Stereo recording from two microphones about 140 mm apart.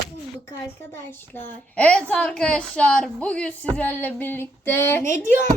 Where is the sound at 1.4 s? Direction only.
10° left (ahead or behind).